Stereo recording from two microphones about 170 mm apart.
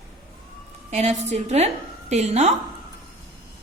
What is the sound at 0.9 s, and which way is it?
A woman's voice, 40° right (ahead or behind).